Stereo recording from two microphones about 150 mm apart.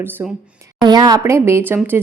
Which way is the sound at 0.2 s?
10° right (ahead or behind).